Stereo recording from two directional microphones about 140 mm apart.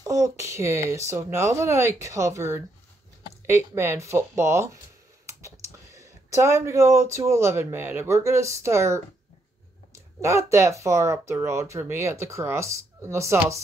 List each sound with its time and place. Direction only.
0.0 s speech: 20° right (ahead or behind)
5.9 s speech: 20° right (ahead or behind)